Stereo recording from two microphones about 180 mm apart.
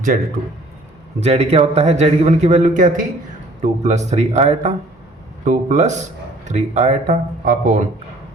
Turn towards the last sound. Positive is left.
turn(degrees=-45)  # may be behind; listen again after turning